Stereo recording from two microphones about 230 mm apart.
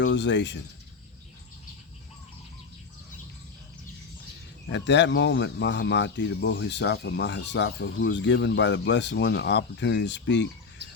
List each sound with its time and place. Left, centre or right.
0.0 s speech: left
4.7 s speech: left